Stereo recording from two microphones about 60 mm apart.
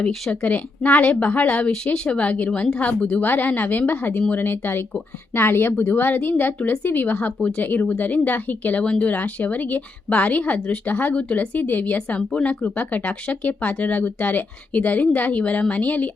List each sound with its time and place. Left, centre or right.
0.3 s a woman's voice: centre
1.7 s a woman's voice: centre